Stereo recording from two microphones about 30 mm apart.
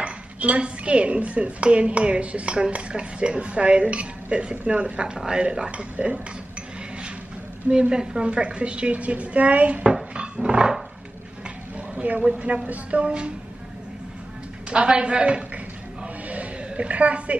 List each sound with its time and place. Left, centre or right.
0.0 s speech: right
6.0 s speech: right
7.9 s a woman's voice: right
8.3 s speech: right
10.1 s dishes: right
12.2 s a woman's voice: right
12.6 s speech: right
14.7 s speech: right
16.3 s a sound: right